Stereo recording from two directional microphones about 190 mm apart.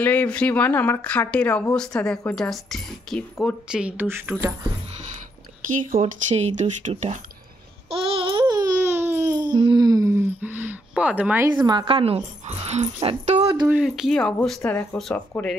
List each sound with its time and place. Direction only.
0.0 s a woman's voice: 5° left (ahead or behind); by 4.6 s 15° right (ahead or behind)
5.9 s speech: 35° right (ahead or behind)
7.9 s babbling: 30° right (ahead or behind)
9.0 s a sound: 15° right (ahead or behind)
11.6 s speech: 25° right (ahead or behind)
13.7 s speech: 5° right (ahead or behind)